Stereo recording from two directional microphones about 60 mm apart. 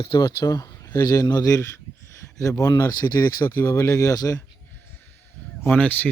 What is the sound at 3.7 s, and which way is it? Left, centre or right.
Speech, left.